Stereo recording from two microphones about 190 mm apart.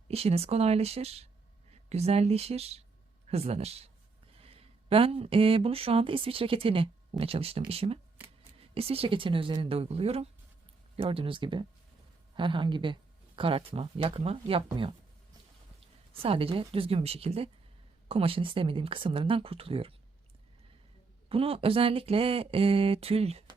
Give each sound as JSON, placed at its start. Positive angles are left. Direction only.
{"t": 0.1, "sound": "speech", "side_deg": -30}
{"t": 16.1, "sound": "speech", "side_deg": -30}
{"t": 21.2, "sound": "speech", "side_deg": -30}